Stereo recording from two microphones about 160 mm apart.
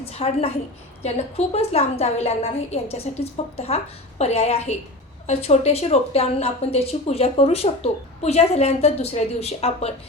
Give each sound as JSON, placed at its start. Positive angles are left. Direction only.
{"t": 0.0, "sound": "a woman's voice", "side_deg": 40}